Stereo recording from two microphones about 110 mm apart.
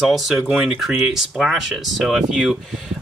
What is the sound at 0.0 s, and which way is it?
Speech, centre (ahead or behind).